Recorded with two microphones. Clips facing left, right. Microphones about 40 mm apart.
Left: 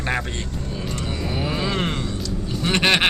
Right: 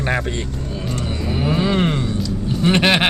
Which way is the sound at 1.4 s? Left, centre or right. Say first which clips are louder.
Right 7 dB; centre.